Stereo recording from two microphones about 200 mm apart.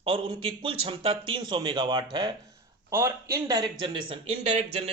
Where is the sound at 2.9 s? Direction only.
15° right (ahead or behind); by 4.9 s 30° right (ahead or behind).